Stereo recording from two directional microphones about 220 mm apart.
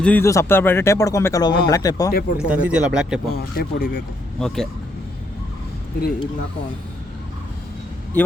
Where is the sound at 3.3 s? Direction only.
45° left (ahead or behind).